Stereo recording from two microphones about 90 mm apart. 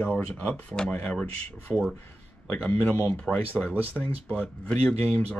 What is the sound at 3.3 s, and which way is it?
Speech, centre (ahead or behind).